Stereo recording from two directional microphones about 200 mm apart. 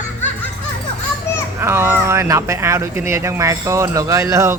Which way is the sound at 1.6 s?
10° right (ahead or behind).